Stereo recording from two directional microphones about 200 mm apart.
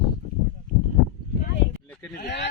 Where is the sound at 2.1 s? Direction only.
55° left (ahead or behind).